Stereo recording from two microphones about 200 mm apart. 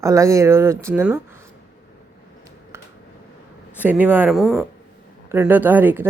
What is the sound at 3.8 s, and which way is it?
Speech, 10° right (ahead or behind).